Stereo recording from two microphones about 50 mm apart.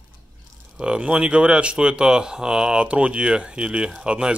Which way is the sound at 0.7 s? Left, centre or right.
Centre.